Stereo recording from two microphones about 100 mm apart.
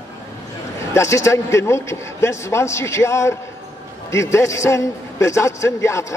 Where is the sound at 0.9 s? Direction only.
30° left (ahead or behind).